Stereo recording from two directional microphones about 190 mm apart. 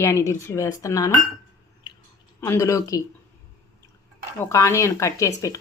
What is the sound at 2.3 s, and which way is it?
Speech, 15° left (ahead or behind).